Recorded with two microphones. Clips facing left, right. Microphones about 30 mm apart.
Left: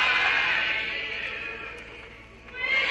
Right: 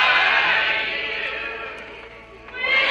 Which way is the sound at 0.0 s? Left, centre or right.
Right.